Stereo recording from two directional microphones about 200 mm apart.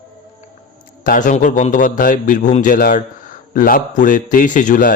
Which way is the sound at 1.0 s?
40° left (ahead or behind).